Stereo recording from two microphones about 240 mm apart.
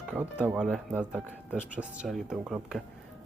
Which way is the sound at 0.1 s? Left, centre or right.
Centre.